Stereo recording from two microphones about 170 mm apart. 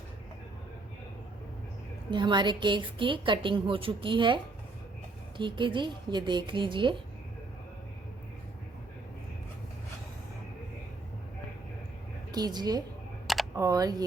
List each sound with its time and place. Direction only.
2.0 s a woman's voice: 25° right (ahead or behind)
5.4 s a woman's voice: 30° right (ahead or behind)
12.3 s a woman's voice: 25° right (ahead or behind)
13.2 s a sound: centre (ahead or behind)
13.6 s a woman's voice: 20° right (ahead or behind)